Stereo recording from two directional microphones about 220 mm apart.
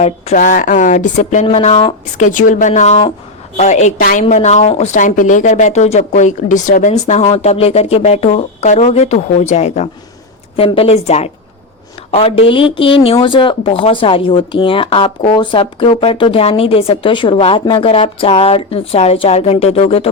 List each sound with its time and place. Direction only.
0.0 s a woman's voice: 35° left (ahead or behind)
2.2 s a woman's voice: 35° left (ahead or behind)